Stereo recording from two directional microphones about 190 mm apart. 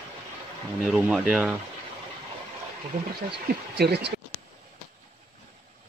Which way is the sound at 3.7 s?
60° right (ahead or behind).